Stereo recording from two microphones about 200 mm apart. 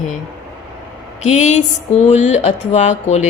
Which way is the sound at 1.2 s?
35° left (ahead or behind).